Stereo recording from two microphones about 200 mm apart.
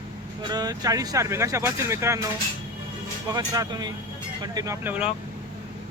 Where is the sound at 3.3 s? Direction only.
20° right (ahead or behind).